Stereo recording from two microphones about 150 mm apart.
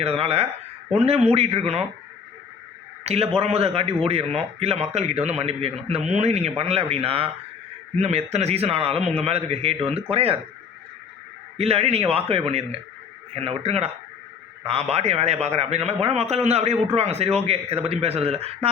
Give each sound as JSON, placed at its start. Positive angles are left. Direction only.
{"t": 0.0, "sound": "a man's voice", "side_deg": -40}
{"t": 3.0, "sound": "a man's voice", "side_deg": -40}
{"t": 11.5, "sound": "a man's voice", "side_deg": -40}